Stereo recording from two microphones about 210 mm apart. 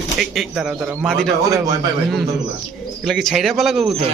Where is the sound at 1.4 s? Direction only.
15° right (ahead or behind).